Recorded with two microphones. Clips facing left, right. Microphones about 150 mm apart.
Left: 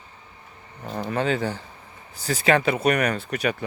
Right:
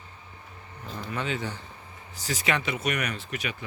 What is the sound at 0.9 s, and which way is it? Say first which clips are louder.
Speech: left 8 dB; 55° left (ahead or behind).